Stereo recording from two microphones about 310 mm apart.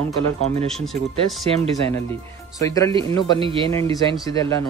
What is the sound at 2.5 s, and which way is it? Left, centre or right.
Speech, centre.